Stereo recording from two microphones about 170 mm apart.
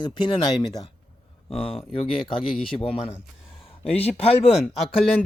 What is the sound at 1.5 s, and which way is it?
Speech, 5° left (ahead or behind).